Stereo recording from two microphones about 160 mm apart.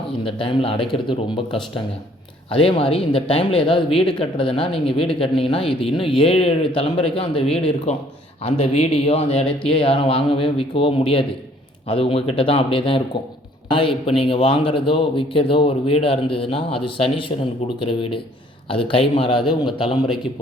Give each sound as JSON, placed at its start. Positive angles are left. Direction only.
{"t": 0.3, "sound": "a man's voice", "side_deg": 35}